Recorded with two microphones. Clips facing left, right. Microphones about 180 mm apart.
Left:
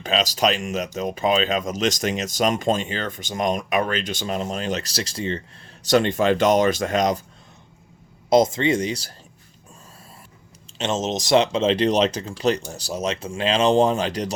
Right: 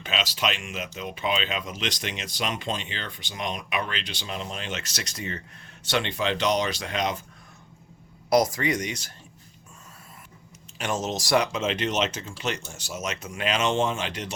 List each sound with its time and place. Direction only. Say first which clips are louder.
0.0 s speech: left 7 dB; 40° left (ahead or behind)
5.8 s speech: left 8 dB; 40° left (ahead or behind)
8.3 s speech: left 5 dB; 25° left (ahead or behind)
10.8 s speech: left 5 dB; 25° left (ahead or behind)